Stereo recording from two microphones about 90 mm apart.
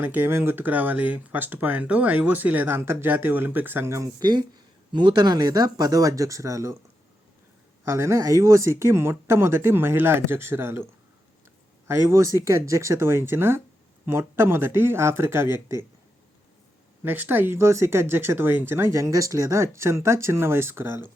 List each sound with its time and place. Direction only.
0.0 s speech: 20° right (ahead or behind)
4.2 s speech: 50° right (ahead or behind)
7.9 s speech: 30° right (ahead or behind)
11.9 s speech: 30° right (ahead or behind)
17.0 s speech: 25° right (ahead or behind)